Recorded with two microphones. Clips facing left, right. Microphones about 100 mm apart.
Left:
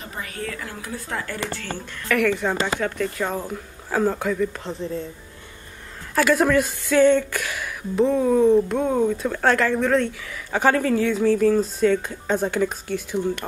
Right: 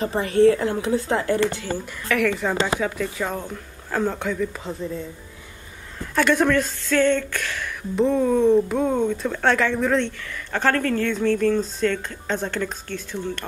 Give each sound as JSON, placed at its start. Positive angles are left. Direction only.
{"t": 0.0, "sound": "speech", "side_deg": -30}
{"t": 2.0, "sound": "speech", "side_deg": 0}